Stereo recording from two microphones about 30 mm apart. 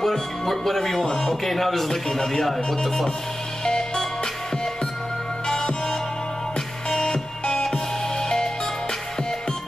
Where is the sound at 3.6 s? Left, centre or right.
Centre.